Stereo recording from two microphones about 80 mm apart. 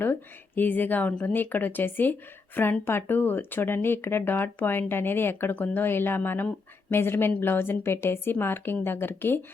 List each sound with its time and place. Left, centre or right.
0.0 s speech: left